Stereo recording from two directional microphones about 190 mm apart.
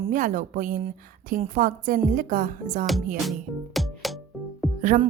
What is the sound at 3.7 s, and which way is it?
Music, centre (ahead or behind).